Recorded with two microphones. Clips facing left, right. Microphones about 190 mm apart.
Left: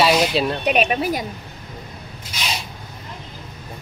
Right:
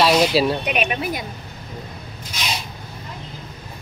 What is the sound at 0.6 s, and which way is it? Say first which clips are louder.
Speech: left 4 dB; 35° left (ahead or behind).